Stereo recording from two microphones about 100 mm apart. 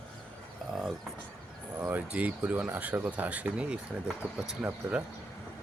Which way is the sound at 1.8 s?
15° right (ahead or behind).